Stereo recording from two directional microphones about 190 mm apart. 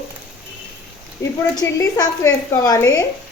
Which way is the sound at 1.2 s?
15° left (ahead or behind).